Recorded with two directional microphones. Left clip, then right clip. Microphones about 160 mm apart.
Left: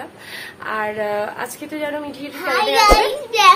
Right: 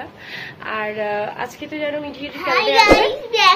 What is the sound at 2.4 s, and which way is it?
Speech, 20° left (ahead or behind).